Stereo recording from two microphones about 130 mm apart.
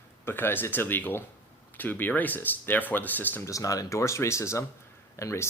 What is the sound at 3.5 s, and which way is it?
Speech, 25° left (ahead or behind).